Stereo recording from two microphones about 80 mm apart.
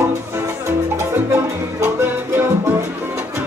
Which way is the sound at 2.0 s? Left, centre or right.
Right.